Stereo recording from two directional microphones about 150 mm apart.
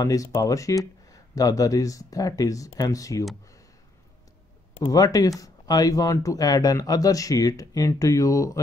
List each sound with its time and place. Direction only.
0.0 s speech: 20° left (ahead or behind)
4.8 s speech: 25° left (ahead or behind)